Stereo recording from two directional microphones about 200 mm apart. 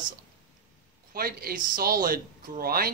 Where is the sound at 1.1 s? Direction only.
50° right (ahead or behind).